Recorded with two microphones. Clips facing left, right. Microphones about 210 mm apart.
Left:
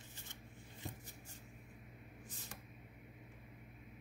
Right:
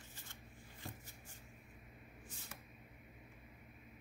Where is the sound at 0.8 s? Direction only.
20° left (ahead or behind).